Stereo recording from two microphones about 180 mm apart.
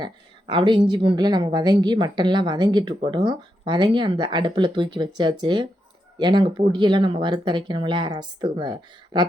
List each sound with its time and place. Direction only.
0.0 s a woman's voice: 25° right (ahead or behind)